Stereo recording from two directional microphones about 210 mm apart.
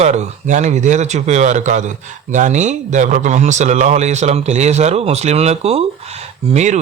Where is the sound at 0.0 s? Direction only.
35° right (ahead or behind).